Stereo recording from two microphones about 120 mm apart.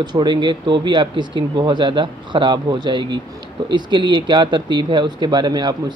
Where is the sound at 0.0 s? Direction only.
35° right (ahead or behind).